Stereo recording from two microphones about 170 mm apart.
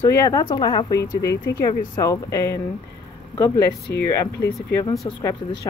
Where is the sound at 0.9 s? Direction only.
75° left (ahead or behind).